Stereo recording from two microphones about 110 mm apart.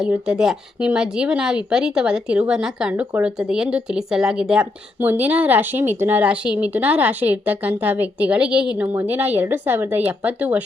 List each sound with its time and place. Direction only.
0.1 s speech: 5° right (ahead or behind)
2.9 s speech: 15° right (ahead or behind)